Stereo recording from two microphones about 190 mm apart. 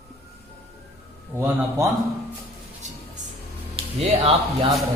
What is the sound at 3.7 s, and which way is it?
Speech, 35° right (ahead or behind).